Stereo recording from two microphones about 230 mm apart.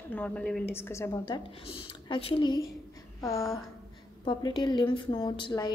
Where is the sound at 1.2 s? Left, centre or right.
Left.